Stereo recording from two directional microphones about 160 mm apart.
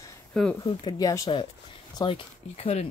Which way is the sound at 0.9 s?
20° left (ahead or behind).